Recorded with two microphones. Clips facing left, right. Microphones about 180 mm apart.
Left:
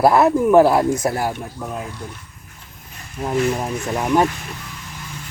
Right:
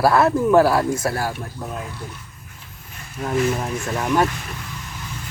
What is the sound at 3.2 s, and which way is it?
Speech, 15° left (ahead or behind).